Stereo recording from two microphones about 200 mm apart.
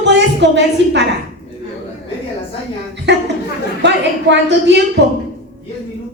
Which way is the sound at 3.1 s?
60° right (ahead or behind).